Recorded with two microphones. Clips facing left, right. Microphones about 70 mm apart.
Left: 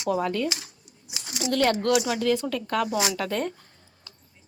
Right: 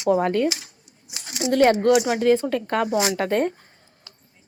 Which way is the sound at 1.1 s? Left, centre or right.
Right.